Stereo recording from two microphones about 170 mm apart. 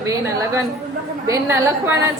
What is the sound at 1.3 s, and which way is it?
Speech, 15° right (ahead or behind).